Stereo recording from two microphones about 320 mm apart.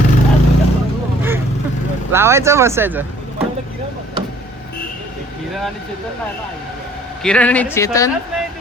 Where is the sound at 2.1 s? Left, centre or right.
Centre.